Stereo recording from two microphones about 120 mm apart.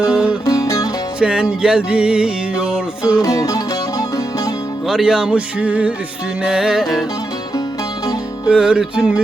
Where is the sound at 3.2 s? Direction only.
25° left (ahead or behind).